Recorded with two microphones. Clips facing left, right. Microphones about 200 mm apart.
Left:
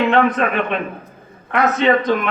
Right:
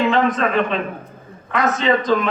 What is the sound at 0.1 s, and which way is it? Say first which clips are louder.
A man's voice: left 1 dB; 60° left (ahead or behind).